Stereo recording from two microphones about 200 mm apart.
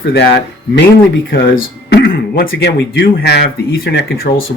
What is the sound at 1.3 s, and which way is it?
Speech, 55° left (ahead or behind).